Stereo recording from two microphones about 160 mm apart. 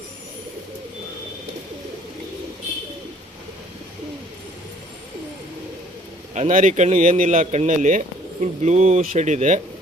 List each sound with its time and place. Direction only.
6.3 s speech: 50° right (ahead or behind)